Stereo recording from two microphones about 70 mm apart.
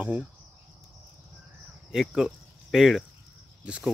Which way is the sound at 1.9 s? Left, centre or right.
Centre.